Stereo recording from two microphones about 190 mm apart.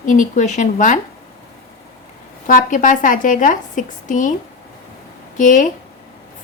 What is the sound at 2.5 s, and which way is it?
A woman's voice, 45° left (ahead or behind).